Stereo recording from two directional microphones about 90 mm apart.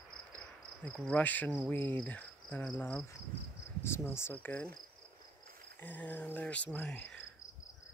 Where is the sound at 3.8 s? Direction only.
30° left (ahead or behind).